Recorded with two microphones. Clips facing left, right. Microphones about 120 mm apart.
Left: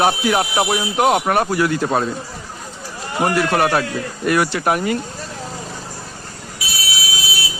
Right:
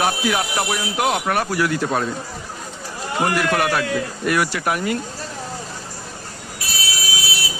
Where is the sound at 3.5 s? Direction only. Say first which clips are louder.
Left 2 dB; 30° left (ahead or behind).